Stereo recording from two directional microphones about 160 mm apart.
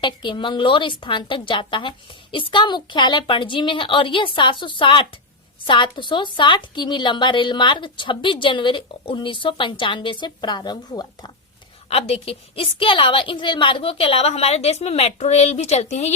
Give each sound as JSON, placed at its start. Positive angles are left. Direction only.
{"t": 0.0, "sound": "a woman's voice", "side_deg": 30}
{"t": 11.9, "sound": "a woman's voice", "side_deg": 40}